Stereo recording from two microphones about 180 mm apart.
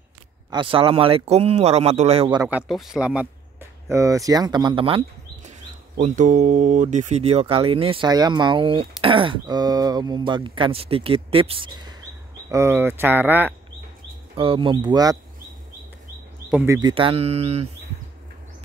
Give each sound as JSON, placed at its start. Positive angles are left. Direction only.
{"t": 0.5, "sound": "speech", "side_deg": -30}
{"t": 2.7, "sound": "speech", "side_deg": -5}
{"t": 3.9, "sound": "speech", "side_deg": -15}
{"t": 12.4, "sound": "speech", "side_deg": -15}
{"t": 14.3, "sound": "speech", "side_deg": -30}
{"t": 16.6, "sound": "speech", "side_deg": -15}
{"t": 16.9, "sound": "speech", "side_deg": -30}